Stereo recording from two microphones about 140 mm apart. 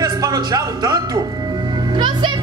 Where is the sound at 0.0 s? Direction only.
25° right (ahead or behind).